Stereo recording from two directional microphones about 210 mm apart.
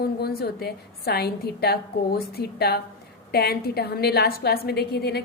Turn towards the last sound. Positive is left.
turn(degrees=50)  # may be behind; listen again after turning